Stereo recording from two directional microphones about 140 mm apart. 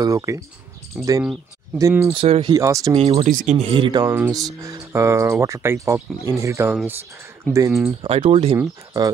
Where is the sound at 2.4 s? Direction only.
25° right (ahead or behind).